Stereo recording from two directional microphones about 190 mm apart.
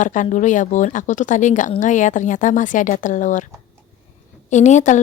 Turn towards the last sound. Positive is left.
turn(degrees=40)  # may be behind; listen again after turning